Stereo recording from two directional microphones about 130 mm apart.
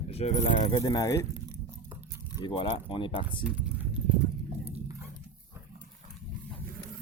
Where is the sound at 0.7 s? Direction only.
30° left (ahead or behind).